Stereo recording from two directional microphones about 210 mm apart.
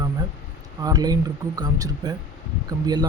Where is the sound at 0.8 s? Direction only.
15° right (ahead or behind).